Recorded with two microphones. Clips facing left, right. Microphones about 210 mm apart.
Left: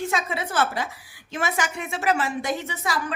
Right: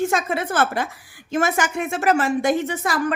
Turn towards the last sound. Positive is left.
turn(degrees=-50)  # may be behind; listen again after turning